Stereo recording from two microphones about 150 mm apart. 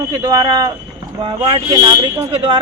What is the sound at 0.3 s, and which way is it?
Speech, 25° right (ahead or behind).